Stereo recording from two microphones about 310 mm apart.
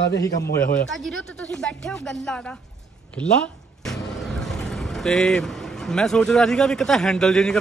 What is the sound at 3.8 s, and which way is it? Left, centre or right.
Speech, centre.